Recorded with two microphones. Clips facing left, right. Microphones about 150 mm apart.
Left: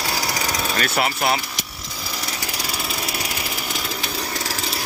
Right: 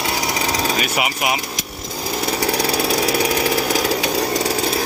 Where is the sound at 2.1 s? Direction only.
55° right (ahead or behind); by 4.7 s 80° right.